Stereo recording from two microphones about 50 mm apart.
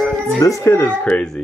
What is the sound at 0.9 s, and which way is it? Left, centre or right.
Speech, left.